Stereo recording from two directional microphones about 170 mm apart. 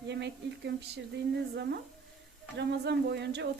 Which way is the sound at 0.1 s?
90° right.